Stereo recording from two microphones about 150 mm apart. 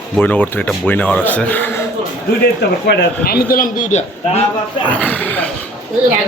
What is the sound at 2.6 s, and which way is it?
A man's voice, 90° left.